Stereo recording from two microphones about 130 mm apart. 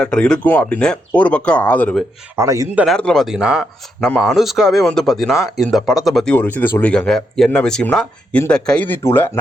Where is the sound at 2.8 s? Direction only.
5° left (ahead or behind).